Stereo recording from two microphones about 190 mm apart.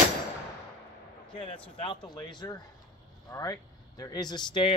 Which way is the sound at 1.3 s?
25° left (ahead or behind).